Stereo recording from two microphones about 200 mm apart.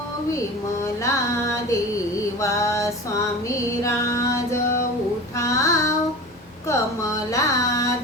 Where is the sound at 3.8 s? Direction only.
15° left (ahead or behind).